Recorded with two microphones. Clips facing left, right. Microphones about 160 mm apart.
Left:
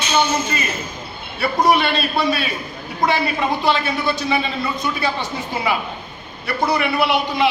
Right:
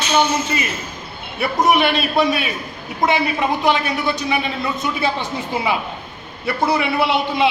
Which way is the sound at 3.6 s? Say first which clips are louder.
Right 1 dB; 15° right (ahead or behind).